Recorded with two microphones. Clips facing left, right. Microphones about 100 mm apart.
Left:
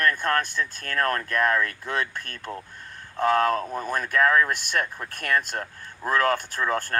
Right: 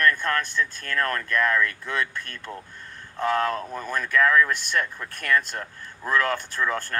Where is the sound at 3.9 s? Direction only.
40° left (ahead or behind).